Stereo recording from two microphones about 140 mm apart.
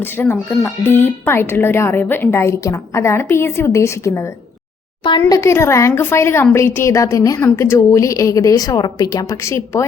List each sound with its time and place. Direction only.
0.0 s a woman's voice: 15° left (ahead or behind)
5.3 s a woman's voice: 20° left (ahead or behind)